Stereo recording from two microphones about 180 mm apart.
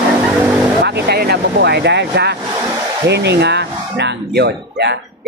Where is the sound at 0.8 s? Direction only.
65° right (ahead or behind).